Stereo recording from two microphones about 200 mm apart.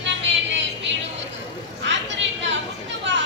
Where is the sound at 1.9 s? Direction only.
65° right (ahead or behind).